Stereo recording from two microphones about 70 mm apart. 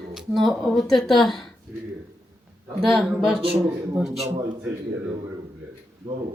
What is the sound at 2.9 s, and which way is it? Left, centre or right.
Speech, centre.